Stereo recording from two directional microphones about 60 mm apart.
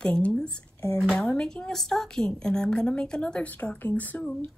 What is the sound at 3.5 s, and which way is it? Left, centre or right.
Speech, left.